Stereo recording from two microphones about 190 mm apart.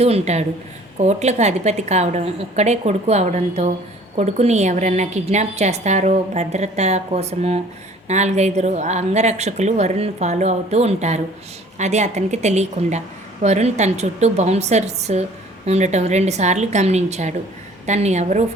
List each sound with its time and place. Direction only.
0.0 s a woman's voice: 35° right (ahead or behind)